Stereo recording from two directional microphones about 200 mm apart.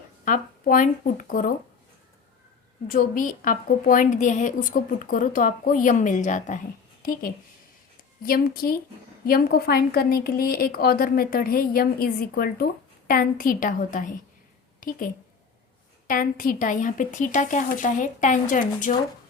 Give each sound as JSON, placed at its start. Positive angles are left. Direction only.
{"t": 0.3, "sound": "a woman's voice", "side_deg": 40}
{"t": 2.8, "sound": "a woman's voice", "side_deg": 40}